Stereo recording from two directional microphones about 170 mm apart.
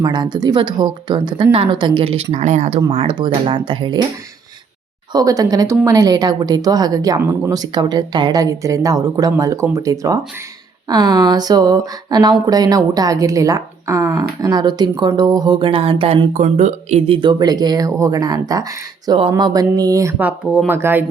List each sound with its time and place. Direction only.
0.0 s speech: 25° right (ahead or behind)
2.3 s speech: 45° right (ahead or behind)
2.9 s speech: 30° right (ahead or behind)
5.1 s speech: 20° right (ahead or behind)
16.3 s speech: 45° right (ahead or behind)
17.2 s speech: 25° right (ahead or behind)